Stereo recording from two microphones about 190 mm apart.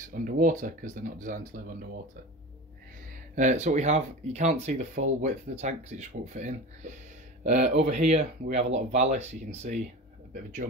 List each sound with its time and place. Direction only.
0.2 s speech: 45° right (ahead or behind)
3.3 s speech: 40° right (ahead or behind)